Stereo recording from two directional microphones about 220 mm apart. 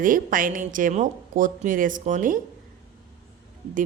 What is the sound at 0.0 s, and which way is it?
A woman's voice, 40° right (ahead or behind).